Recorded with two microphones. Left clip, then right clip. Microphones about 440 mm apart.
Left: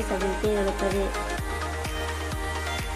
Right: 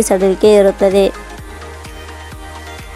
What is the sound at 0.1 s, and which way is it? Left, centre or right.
Speech, right.